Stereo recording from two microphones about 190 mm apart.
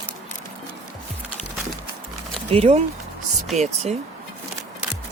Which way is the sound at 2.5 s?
30° right (ahead or behind).